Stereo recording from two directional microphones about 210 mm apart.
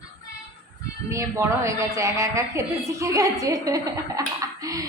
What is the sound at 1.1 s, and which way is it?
A woman's voice, 15° right (ahead or behind).